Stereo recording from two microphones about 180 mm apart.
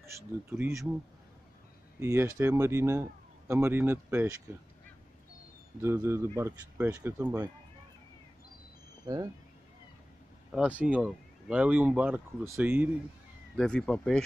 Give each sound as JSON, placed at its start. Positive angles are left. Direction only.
{"t": 0.0, "sound": "a man's voice", "side_deg": -15}
{"t": 2.0, "sound": "a man's voice", "side_deg": -15}
{"t": 5.8, "sound": "a man's voice", "side_deg": -15}
{"t": 9.0, "sound": "speech", "side_deg": -20}
{"t": 10.8, "sound": "a man's voice", "side_deg": -5}
{"t": 13.6, "sound": "speech", "side_deg": 5}